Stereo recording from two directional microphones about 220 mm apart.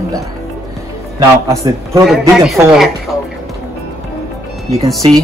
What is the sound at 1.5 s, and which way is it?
Speech, 15° right (ahead or behind).